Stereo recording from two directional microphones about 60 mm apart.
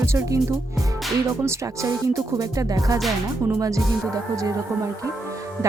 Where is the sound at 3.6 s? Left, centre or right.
Right.